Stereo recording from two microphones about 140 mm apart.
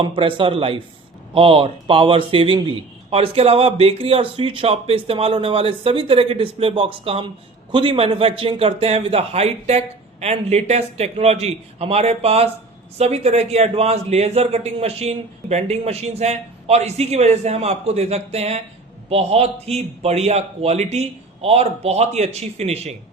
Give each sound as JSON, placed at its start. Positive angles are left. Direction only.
{"t": 0.0, "sound": "a man's voice", "side_deg": -35}